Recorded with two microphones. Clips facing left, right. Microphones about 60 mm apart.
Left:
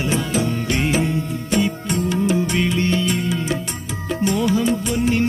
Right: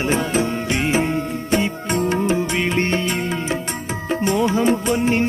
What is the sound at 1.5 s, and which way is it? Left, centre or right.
Music, right.